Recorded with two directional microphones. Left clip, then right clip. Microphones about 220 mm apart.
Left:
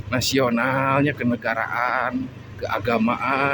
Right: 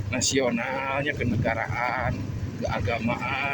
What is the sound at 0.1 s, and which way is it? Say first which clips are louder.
Speech: left 4 dB; 30° left (ahead or behind).